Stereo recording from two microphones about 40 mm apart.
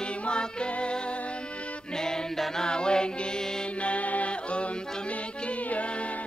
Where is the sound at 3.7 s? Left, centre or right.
Left.